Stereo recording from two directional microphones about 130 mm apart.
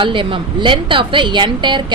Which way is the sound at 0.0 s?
40° right (ahead or behind).